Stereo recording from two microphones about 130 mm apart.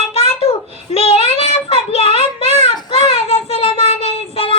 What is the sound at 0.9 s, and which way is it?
Child singing, 50° left (ahead or behind).